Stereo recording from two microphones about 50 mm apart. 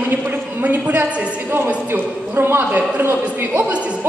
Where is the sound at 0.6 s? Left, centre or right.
Right.